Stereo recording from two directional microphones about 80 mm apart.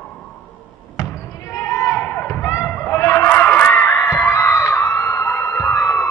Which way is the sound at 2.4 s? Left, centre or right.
Left.